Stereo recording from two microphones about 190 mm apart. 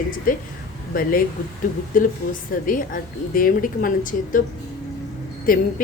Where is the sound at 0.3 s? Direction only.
45° left (ahead or behind).